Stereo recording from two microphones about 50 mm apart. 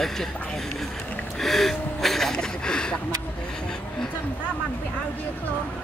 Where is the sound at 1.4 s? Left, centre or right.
Centre.